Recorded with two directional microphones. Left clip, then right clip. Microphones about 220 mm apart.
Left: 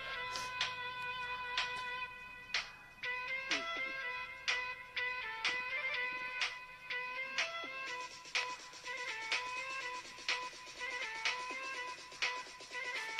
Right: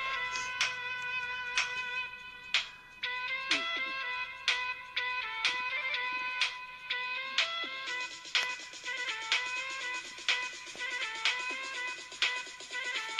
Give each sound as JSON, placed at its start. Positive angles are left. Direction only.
{"t": 0.0, "sound": "music", "side_deg": -35}
{"t": 2.5, "sound": "music", "side_deg": -20}